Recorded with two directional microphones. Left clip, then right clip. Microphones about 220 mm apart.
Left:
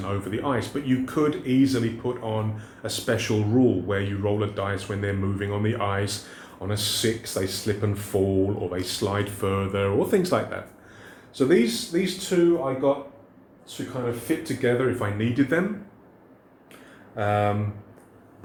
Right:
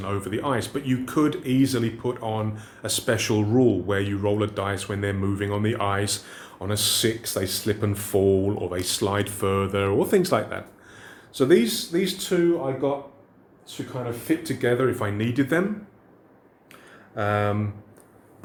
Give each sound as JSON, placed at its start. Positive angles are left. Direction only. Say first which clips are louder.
{"t": 0.0, "sound": "speech", "louder": "right 1 dB", "side_deg": -40}
{"t": 14.4, "sound": "speech", "louder": "even", "side_deg": -45}
{"t": 17.2, "sound": "speech", "louder": "left 1 dB", "side_deg": -30}